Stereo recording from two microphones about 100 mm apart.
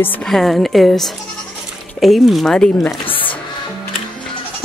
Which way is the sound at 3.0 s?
65° left (ahead or behind).